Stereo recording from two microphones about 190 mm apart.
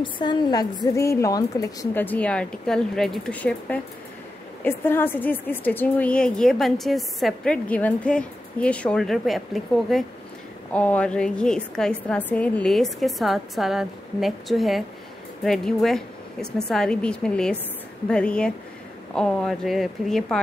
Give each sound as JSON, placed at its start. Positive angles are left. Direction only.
{"t": 0.0, "sound": "a woman's voice", "side_deg": 25}